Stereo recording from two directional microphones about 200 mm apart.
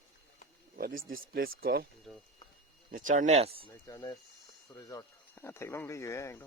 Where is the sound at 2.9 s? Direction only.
40° right (ahead or behind).